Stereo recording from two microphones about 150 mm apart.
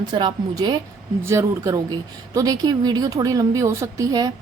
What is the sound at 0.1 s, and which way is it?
Speech, 30° right (ahead or behind).